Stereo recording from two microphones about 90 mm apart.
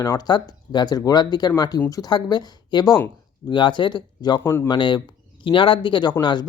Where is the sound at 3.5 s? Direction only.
60° left (ahead or behind).